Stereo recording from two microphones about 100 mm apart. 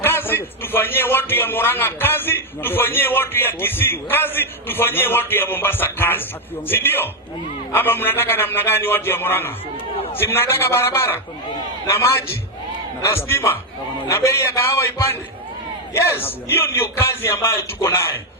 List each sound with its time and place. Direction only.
0.0 s a man's voice: 20° left (ahead or behind)